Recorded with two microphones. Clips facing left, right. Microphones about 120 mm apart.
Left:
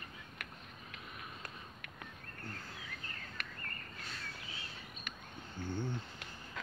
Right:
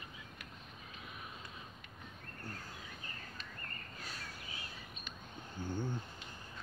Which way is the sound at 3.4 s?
70° left (ahead or behind).